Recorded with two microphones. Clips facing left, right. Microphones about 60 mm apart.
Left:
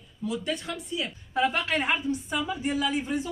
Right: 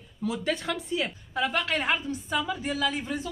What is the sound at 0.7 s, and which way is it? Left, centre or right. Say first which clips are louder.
Speech: right 4 dB; right.